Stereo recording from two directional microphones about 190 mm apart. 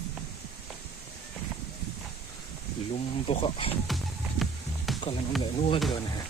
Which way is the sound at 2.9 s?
30° left (ahead or behind).